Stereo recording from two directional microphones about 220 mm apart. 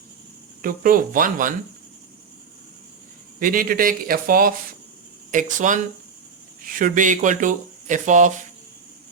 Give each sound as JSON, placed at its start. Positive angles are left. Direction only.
{"t": 0.6, "sound": "speech", "side_deg": -40}
{"t": 3.4, "sound": "speech", "side_deg": -40}